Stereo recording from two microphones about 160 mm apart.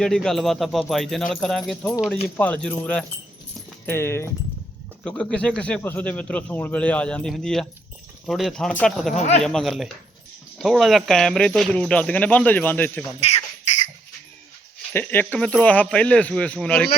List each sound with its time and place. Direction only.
0.0 s speech: 5° left (ahead or behind)
3.8 s speech: 15° left (ahead or behind)
9.1 s speech: 45° left (ahead or behind)
9.4 s speech: centre (ahead or behind)
14.9 s speech: 10° left (ahead or behind)